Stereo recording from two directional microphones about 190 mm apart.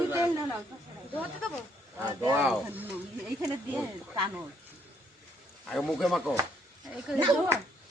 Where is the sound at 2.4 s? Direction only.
5° right (ahead or behind).